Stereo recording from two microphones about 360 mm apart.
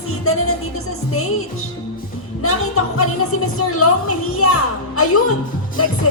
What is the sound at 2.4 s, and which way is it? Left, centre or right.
Speech, left.